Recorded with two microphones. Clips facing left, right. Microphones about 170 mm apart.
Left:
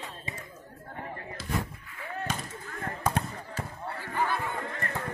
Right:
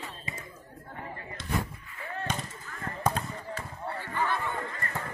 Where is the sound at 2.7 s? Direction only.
50° left (ahead or behind).